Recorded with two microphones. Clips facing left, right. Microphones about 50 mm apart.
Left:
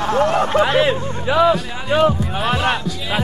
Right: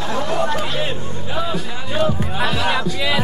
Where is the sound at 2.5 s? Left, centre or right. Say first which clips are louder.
Left 4 dB; left.